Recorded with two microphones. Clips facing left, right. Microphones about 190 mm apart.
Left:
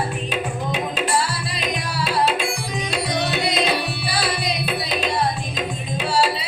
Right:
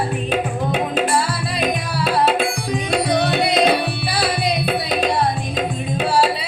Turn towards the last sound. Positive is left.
turn(degrees=-55)  # may be behind; listen again after turning